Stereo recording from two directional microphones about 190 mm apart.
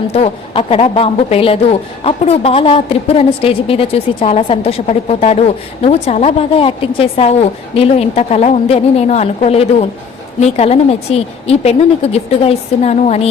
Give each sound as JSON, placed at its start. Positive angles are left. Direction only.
{"t": 0.1, "sound": "a woman's voice", "side_deg": 30}